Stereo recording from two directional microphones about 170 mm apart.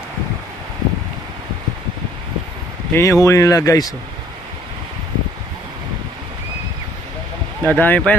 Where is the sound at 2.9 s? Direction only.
15° left (ahead or behind).